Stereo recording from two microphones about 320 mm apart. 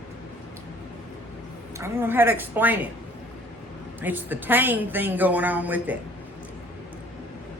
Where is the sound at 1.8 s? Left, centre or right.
Centre.